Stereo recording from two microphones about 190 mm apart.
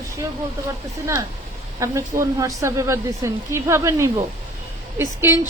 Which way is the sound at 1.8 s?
15° right (ahead or behind).